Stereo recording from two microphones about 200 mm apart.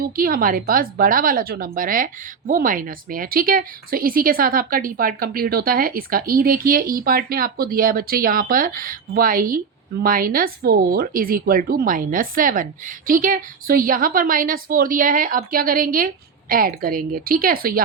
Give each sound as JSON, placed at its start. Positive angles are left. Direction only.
{"t": 0.0, "sound": "speech", "side_deg": -45}